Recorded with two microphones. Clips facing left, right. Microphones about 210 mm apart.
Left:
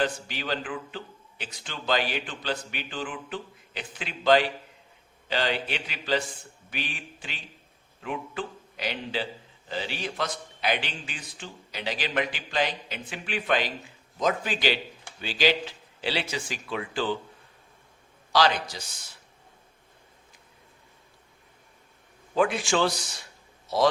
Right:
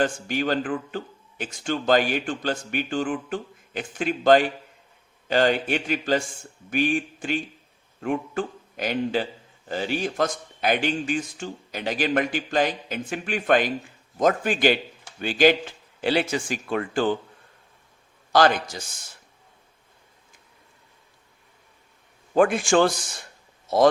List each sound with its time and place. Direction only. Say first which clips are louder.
0.0 s a man's voice: right 5 dB; 50° right (ahead or behind)
18.3 s a man's voice: right 4 dB; 50° right (ahead or behind)
22.4 s a man's voice: right 6 dB; 50° right (ahead or behind)